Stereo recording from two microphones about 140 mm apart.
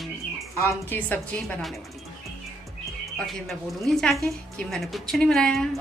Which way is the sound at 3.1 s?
Centre (ahead or behind).